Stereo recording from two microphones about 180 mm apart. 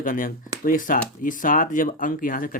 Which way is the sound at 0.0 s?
50° left (ahead or behind).